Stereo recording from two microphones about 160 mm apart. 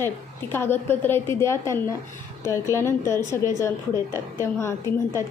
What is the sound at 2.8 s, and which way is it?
A woman's voice, 15° left (ahead or behind).